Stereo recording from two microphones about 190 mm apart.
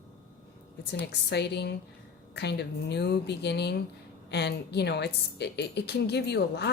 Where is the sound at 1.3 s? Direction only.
60° left (ahead or behind).